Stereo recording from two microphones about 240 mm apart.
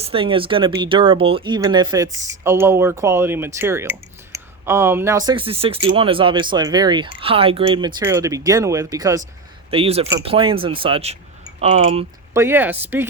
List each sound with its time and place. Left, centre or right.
0.0 s speech: right
12.3 s speech: centre